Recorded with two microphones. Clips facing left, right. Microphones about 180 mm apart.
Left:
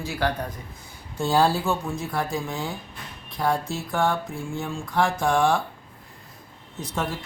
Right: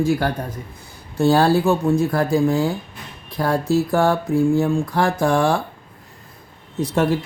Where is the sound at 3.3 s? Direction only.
65° right (ahead or behind).